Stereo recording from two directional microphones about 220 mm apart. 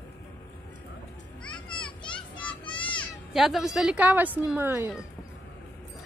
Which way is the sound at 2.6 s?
20° left (ahead or behind).